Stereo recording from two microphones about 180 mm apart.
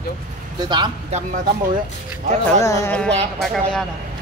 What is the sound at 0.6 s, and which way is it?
Speech, 25° right (ahead or behind).